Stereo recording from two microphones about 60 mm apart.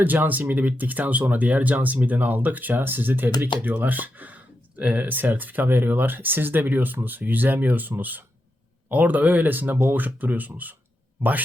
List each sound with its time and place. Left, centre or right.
0.0 s speech: right